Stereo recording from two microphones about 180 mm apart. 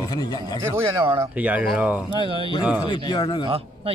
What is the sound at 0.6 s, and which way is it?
Speech, 15° right (ahead or behind).